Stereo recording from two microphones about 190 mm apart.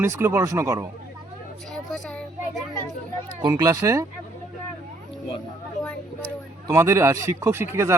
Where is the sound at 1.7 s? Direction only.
5° left (ahead or behind).